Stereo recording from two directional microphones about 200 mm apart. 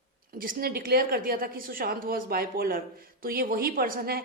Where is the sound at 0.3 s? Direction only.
45° right (ahead or behind).